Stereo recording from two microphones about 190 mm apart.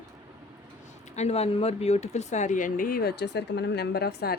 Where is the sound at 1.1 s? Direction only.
35° left (ahead or behind).